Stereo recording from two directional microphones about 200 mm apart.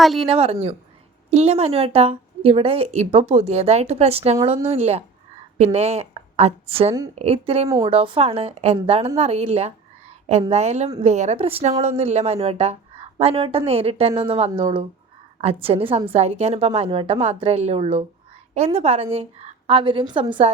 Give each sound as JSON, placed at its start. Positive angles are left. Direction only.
{"t": 0.0, "sound": "a woman's voice", "side_deg": 0}
{"t": 0.3, "sound": "a woman's voice", "side_deg": -30}